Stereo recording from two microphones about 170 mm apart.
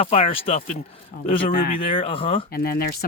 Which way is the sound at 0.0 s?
35° left (ahead or behind).